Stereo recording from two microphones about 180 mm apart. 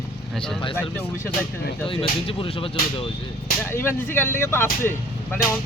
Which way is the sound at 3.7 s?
10° left (ahead or behind).